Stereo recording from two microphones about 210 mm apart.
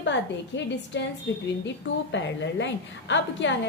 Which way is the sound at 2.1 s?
60° left (ahead or behind).